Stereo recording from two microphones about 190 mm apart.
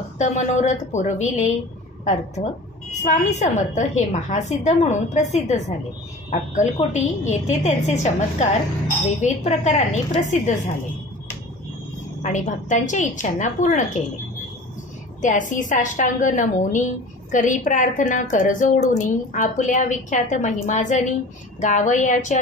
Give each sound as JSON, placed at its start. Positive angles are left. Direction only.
{"t": 0.2, "sound": "a woman's voice", "side_deg": 40}
{"t": 2.9, "sound": "a woman's voice", "side_deg": 40}
{"t": 12.2, "sound": "a woman's voice", "side_deg": 40}
{"t": 15.2, "sound": "a woman's voice", "side_deg": 40}